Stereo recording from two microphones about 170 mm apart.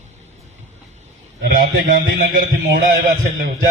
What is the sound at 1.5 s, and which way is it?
Speech, 55° right (ahead or behind).